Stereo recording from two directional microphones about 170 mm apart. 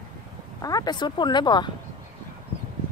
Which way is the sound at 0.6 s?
20° left (ahead or behind).